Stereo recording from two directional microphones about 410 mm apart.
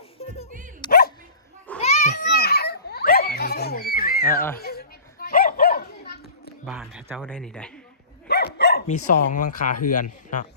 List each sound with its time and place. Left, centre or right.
0.8 s dog: left
1.8 s children playing: centre
4.5 s dog: left
6.7 s a sound: centre
8.3 s dog: left
9.8 s speech: centre